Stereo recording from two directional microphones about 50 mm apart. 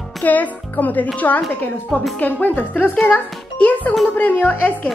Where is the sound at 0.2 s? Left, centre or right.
Left.